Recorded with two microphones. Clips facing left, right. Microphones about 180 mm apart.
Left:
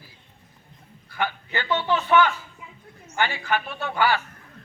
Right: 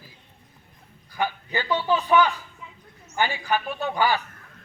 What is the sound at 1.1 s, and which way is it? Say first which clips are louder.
A man's voice: right 1 dB; 15° right (ahead or behind).